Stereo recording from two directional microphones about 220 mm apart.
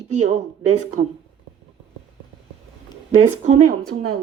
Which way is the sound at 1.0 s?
35° right (ahead or behind).